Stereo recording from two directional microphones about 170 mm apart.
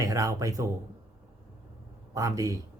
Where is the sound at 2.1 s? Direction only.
20° right (ahead or behind).